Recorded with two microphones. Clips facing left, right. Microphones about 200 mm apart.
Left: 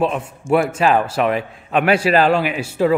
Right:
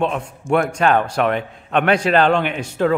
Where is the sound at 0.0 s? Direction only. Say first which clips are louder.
Left 2 dB; 5° left (ahead or behind).